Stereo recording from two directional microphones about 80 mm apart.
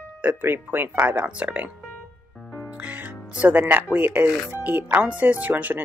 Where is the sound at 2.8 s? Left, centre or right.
Right.